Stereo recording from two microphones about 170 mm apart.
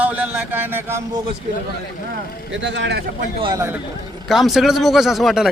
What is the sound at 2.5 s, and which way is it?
Speech, 90° right.